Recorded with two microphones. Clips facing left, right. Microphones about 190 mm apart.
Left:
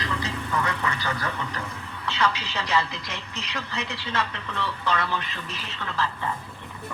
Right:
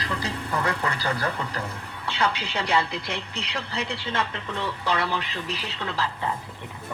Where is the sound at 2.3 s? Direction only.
60° right (ahead or behind).